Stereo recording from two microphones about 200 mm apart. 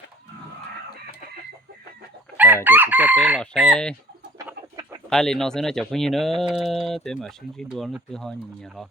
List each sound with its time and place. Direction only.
2.6 s chicken: 10° right (ahead or behind)
3.4 s speech: centre (ahead or behind)
4.4 s chicken: 15° right (ahead or behind)
5.0 s speech: 5° left (ahead or behind)